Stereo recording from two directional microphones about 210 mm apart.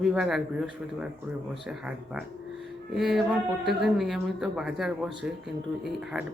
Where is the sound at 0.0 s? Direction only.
Centre (ahead or behind).